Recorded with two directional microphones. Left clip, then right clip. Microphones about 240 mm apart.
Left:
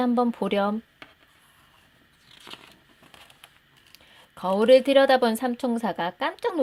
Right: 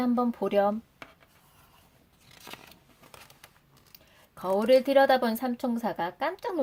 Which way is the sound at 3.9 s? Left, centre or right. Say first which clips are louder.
Left 3 dB; left.